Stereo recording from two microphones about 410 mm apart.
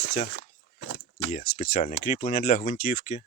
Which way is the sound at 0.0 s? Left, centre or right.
Left.